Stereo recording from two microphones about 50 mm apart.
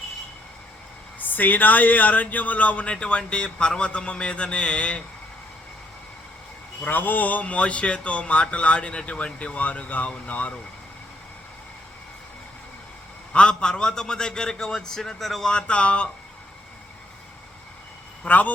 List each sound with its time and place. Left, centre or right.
1.2 s speech: left
6.8 s speech: left
13.3 s a man's voice: centre
15.4 s speech: centre
18.2 s speech: left